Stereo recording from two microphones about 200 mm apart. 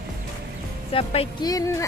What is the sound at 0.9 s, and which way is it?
Speech, 30° left (ahead or behind).